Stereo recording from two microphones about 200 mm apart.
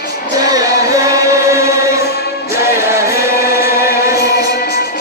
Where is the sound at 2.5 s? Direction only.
15° right (ahead or behind).